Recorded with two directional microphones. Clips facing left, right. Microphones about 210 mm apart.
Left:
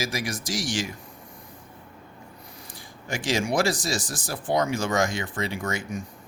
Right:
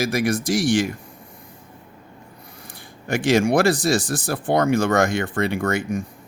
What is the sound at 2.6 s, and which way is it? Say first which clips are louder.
Speech: right 7 dB; 60° right (ahead or behind).